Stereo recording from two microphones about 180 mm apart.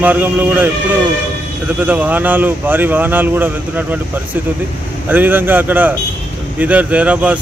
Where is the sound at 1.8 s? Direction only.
10° right (ahead or behind).